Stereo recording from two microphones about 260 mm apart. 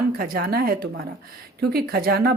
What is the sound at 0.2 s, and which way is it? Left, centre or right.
A woman's voice, right.